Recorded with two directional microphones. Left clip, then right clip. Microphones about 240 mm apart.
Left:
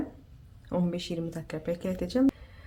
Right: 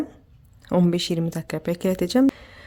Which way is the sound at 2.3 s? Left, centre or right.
Right.